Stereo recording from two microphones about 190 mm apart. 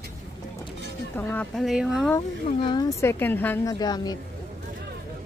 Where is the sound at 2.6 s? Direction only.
20° left (ahead or behind).